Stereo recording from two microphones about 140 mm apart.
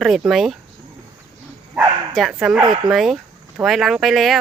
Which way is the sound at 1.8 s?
5° right (ahead or behind).